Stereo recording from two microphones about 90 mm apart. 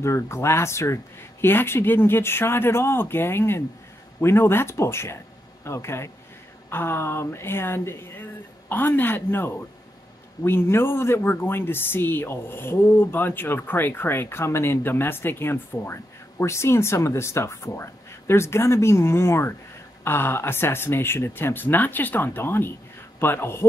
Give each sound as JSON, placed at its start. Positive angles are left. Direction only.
{"t": 0.0, "sound": "speech", "side_deg": 30}